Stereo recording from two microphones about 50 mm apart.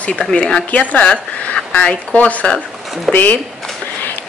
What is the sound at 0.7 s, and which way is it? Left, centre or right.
Speech, left.